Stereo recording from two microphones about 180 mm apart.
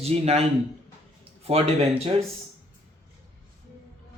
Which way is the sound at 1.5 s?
35° right (ahead or behind).